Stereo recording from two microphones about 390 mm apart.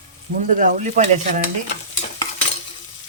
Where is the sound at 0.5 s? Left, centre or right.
Centre.